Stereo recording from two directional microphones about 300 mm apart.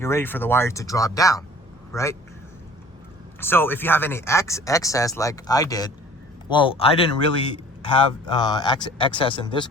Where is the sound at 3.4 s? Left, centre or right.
Centre.